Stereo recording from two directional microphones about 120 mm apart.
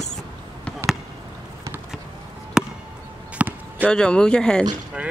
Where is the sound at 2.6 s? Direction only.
5° right (ahead or behind).